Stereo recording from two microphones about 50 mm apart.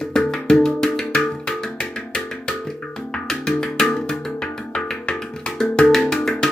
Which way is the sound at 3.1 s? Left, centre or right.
Centre.